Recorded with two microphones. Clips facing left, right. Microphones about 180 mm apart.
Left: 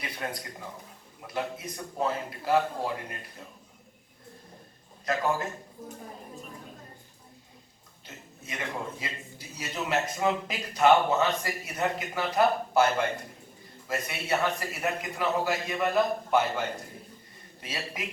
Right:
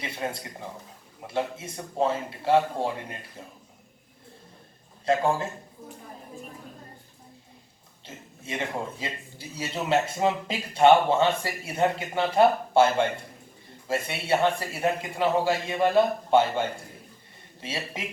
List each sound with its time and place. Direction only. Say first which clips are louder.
0.0 s a man's voice: right 3 dB; 25° right (ahead or behind)
5.0 s a man's voice: right 4 dB; 30° right (ahead or behind)
8.0 s a man's voice: right 5 dB; 25° right (ahead or behind)